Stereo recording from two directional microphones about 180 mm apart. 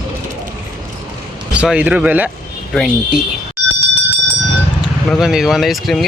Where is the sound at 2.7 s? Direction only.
Centre (ahead or behind).